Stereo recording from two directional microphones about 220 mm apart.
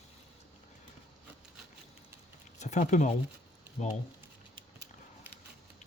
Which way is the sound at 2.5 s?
35° left (ahead or behind).